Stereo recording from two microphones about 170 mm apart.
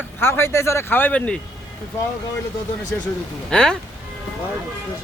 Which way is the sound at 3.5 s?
5° left (ahead or behind).